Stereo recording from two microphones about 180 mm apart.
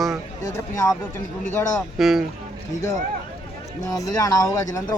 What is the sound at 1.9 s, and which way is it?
Speech, centre (ahead or behind).